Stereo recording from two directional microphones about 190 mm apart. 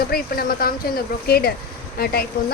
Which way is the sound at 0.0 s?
50° left (ahead or behind).